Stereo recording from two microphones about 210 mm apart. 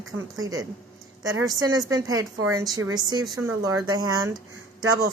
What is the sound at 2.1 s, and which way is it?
Speech, 90° right.